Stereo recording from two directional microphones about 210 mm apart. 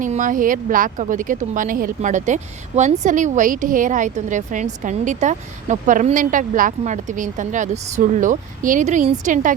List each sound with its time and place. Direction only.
0.0 s speech: 40° right (ahead or behind)